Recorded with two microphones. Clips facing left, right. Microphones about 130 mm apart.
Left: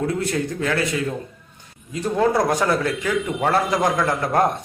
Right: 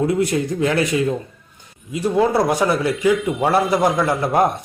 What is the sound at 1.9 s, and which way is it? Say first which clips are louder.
A man's voice: right 2 dB; 10° right (ahead or behind).